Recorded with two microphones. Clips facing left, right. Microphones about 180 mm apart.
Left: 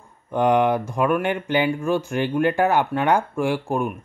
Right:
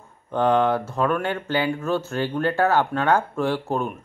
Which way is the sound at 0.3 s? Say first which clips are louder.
Left 1 dB; 15° left (ahead or behind).